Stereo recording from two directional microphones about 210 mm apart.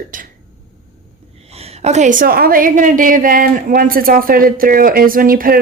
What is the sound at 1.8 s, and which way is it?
A woman's voice, 35° right (ahead or behind).